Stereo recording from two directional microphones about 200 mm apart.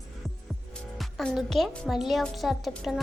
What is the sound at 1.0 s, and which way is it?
Speech, centre (ahead or behind).